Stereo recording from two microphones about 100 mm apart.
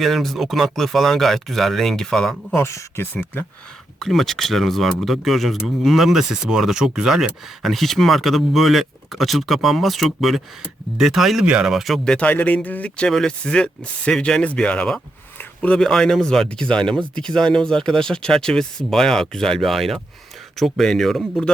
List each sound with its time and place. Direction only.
0.0 s speech: centre (ahead or behind)
2.6 s speech: 25° left (ahead or behind)
4.0 s speech: centre (ahead or behind)
12.0 s speech: 10° left (ahead or behind)